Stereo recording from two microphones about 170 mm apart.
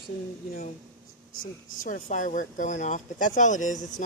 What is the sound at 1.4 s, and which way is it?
Speech, 50° left (ahead or behind).